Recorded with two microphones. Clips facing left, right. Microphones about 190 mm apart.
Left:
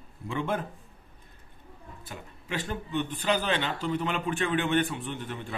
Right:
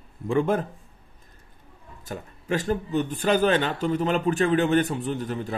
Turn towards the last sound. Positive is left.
turn(degrees=-40)  # may be behind; listen again after turning